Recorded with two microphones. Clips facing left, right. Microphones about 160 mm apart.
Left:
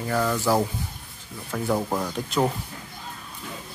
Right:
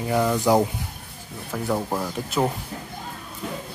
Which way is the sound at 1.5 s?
5° right (ahead or behind).